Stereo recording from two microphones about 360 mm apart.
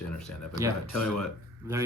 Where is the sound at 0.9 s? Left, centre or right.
Left.